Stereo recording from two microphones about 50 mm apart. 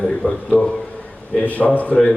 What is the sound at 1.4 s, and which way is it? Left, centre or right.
Speech, left.